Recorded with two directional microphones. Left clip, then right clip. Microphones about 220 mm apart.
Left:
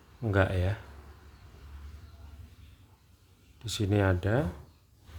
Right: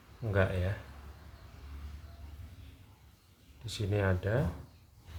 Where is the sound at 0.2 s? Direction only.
50° left (ahead or behind).